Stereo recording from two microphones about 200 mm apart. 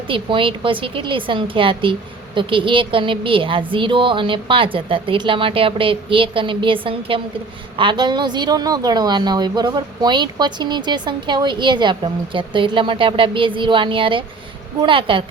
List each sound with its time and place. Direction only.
0.1 s speech: 25° right (ahead or behind)